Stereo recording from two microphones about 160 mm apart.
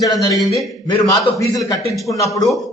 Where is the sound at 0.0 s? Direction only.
20° left (ahead or behind).